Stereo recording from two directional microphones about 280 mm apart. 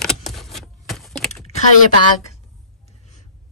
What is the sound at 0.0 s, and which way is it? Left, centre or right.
Computer keyboard, centre.